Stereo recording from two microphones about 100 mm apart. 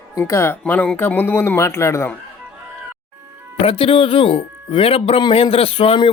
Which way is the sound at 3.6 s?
70° left (ahead or behind).